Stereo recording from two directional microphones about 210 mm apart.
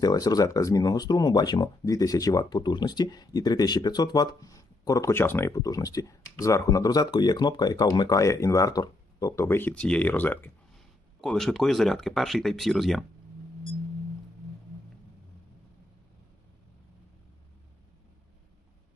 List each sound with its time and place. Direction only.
0.0 s speech: 20° left (ahead or behind); by 13.1 s centre (ahead or behind)